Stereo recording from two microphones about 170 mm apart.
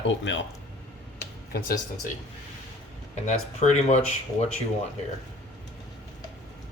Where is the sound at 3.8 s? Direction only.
40° left (ahead or behind).